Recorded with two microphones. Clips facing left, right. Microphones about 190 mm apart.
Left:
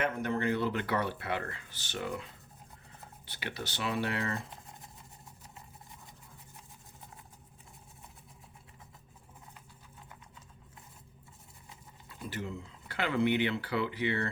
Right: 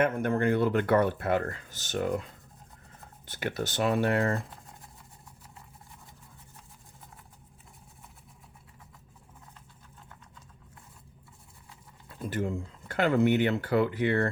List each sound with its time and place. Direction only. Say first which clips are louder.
0.0 s speech: right 6 dB; 50° right (ahead or behind)
12.0 s speech: right 8 dB; 50° right (ahead or behind)